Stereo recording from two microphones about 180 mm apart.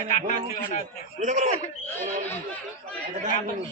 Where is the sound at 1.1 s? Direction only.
40° right (ahead or behind).